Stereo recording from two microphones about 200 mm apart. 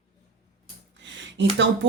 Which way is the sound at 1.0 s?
65° right (ahead or behind).